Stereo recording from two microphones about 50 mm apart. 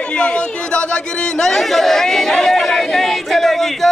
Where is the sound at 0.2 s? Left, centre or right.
Left.